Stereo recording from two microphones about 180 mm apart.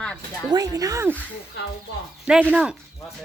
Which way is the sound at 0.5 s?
20° right (ahead or behind).